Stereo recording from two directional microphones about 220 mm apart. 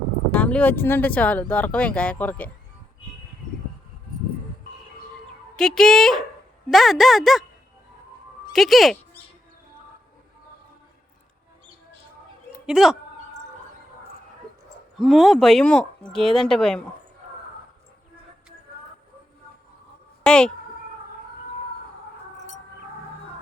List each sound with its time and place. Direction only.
0.3 s speech: 5° left (ahead or behind)
5.5 s speech: centre (ahead or behind)
8.5 s speech: centre (ahead or behind)
12.6 s speech: 5° right (ahead or behind)
14.9 s speech: centre (ahead or behind)
20.2 s speech: 5° left (ahead or behind)